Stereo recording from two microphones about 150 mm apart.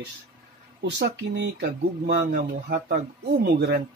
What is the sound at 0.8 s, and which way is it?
Speech, 90° right.